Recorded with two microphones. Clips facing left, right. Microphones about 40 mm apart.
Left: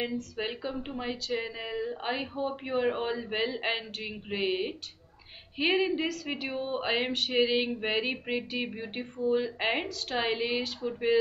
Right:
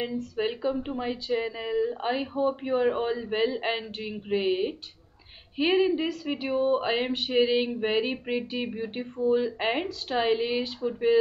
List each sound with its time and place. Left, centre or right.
0.7 s speech: centre